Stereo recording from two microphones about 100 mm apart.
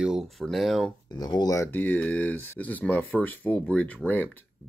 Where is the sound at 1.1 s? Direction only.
40° left (ahead or behind).